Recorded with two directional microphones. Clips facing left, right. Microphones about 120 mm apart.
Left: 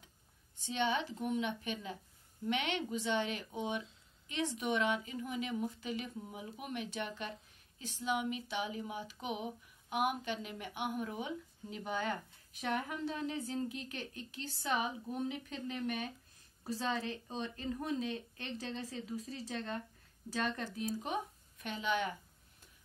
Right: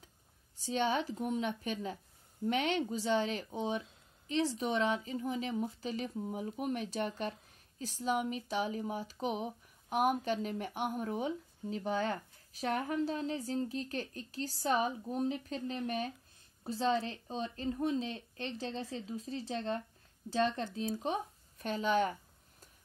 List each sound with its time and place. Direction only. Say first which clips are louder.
0.6 s speech: right 2 dB; 40° right (ahead or behind)